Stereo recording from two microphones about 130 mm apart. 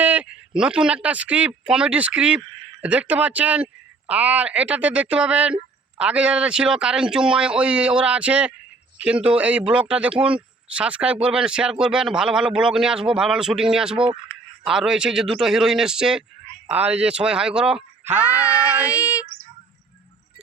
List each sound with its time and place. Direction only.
0.0 s a man's voice: 10° right (ahead or behind)
18.9 s female singing: 25° left (ahead or behind)